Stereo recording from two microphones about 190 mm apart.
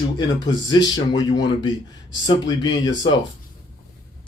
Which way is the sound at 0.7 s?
20° left (ahead or behind).